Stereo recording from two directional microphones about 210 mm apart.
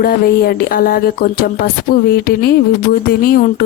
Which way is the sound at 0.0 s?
45° left (ahead or behind).